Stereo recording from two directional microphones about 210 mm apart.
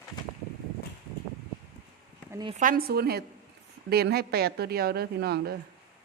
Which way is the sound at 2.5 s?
40° right (ahead or behind).